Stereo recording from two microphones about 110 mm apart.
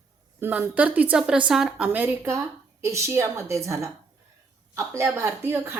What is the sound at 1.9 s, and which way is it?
Speech, 20° right (ahead or behind).